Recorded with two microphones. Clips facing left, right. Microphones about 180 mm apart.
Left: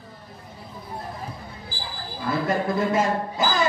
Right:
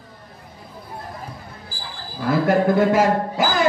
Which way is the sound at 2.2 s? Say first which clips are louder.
Right 7 dB; 70° right (ahead or behind).